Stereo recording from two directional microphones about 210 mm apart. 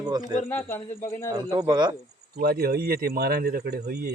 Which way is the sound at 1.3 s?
20° right (ahead or behind).